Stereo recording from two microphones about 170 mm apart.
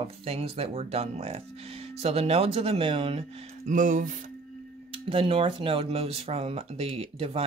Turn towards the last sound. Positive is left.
turn(degrees=-35)  # may be behind; listen again after turning